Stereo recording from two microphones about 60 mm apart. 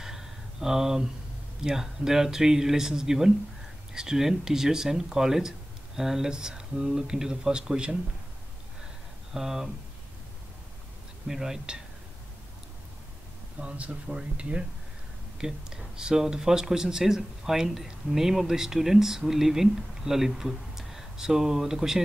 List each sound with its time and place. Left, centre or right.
0.0 s a sound: centre
1.6 s speech: centre
9.3 s speech: centre
11.2 s speech: centre
13.6 s speech: right